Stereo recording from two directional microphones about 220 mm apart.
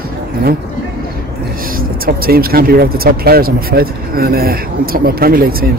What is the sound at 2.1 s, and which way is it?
Speech, 45° right (ahead or behind).